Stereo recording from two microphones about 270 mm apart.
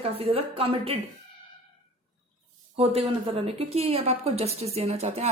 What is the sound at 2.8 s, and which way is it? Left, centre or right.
A woman's voice, right.